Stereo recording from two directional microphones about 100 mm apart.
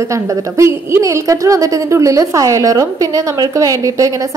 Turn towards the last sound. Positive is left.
turn(degrees=-35)  # may be behind; listen again after turning